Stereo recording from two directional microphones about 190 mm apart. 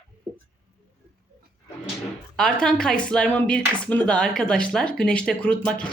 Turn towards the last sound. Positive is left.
turn(degrees=5)  # may be behind; listen again after turning